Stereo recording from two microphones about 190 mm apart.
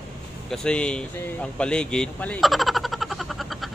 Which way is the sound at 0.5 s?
5° left (ahead or behind).